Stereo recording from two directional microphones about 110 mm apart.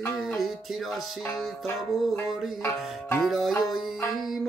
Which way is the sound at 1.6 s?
25° left (ahead or behind).